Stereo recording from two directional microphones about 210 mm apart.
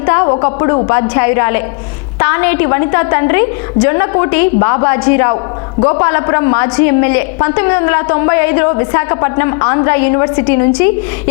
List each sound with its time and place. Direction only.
0.0 s a woman's voice: 20° left (ahead or behind)